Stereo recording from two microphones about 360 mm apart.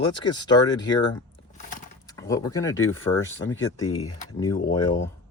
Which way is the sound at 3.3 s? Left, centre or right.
Left.